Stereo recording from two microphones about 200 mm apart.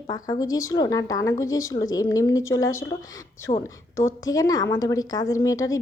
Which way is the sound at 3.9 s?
15° left (ahead or behind).